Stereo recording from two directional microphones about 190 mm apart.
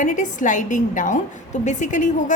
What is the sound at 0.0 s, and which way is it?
A woman's voice, 40° left (ahead or behind).